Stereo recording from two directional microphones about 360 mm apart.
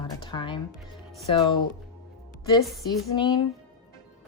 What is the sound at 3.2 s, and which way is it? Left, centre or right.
Speech, centre.